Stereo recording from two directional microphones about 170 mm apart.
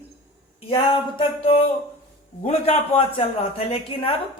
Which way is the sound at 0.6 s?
30° left (ahead or behind).